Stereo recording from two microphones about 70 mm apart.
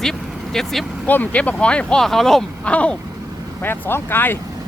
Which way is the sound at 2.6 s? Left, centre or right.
Centre.